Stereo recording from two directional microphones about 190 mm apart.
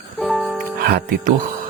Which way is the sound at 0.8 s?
55° right (ahead or behind).